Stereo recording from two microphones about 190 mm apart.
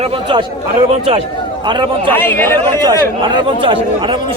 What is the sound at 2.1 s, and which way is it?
Speech, 10° left (ahead or behind).